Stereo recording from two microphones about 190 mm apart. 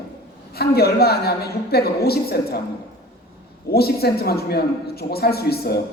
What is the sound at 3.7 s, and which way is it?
A man's voice, 55° left (ahead or behind).